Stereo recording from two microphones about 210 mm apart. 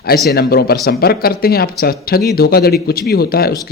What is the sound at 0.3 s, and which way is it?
A man's voice, 50° left (ahead or behind).